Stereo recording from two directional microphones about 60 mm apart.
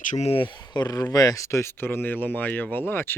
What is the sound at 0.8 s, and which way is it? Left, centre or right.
Speech, left.